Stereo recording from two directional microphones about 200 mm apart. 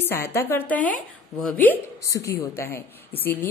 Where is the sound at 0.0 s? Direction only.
10° left (ahead or behind).